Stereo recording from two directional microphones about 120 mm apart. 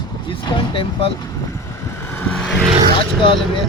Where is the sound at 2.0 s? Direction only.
20° left (ahead or behind).